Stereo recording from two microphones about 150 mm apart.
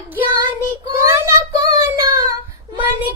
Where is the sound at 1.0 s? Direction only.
20° right (ahead or behind).